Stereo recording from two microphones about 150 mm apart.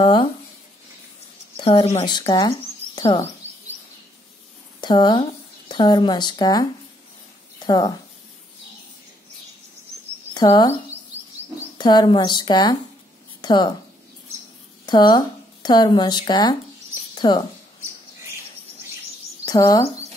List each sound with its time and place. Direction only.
0.0 s speech: 35° left (ahead or behind)
1.6 s speech: 40° left (ahead or behind)
2.0 s speech: 30° left (ahead or behind)
4.7 s speech: 30° left (ahead or behind)
10.3 s speech: 30° left (ahead or behind)
11.8 s speech: 30° left (ahead or behind)
13.4 s a sound: 30° left (ahead or behind)
14.9 s speech: 30° left (ahead or behind)
19.4 s speech: 25° left (ahead or behind)